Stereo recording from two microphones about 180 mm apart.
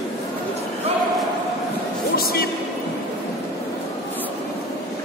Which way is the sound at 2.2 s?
55° left (ahead or behind).